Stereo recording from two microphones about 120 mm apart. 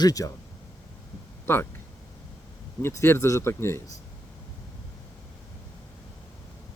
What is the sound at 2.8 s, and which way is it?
Speech, 20° left (ahead or behind).